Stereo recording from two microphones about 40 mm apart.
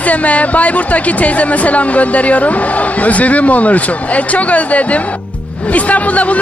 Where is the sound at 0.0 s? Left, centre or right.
Left.